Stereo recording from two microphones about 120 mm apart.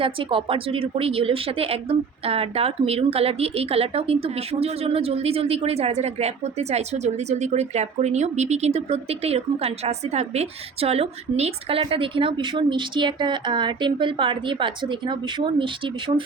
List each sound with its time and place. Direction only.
0.0 s speech: 50° right (ahead or behind)